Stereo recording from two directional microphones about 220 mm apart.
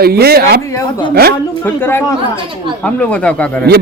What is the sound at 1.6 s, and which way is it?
Speech, 10° left (ahead or behind).